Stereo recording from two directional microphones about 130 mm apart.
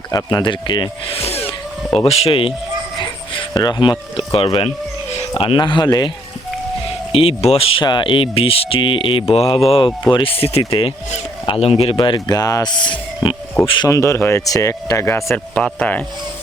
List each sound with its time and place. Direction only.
0.1 s speech: 30° left (ahead or behind)
1.2 s a sound: 50° left (ahead or behind)
2.0 s speech: 50° left (ahead or behind)
3.0 s speech: 35° left (ahead or behind)
7.1 s speech: 45° left (ahead or behind)
11.9 s speech: 35° left (ahead or behind)
13.8 s speech: 25° left (ahead or behind)